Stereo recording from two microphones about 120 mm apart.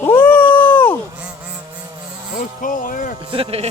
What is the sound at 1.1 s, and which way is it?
Insect, 10° right (ahead or behind).